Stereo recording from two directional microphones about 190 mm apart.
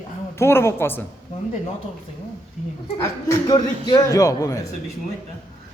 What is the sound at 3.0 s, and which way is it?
A man's voice, 15° left (ahead or behind).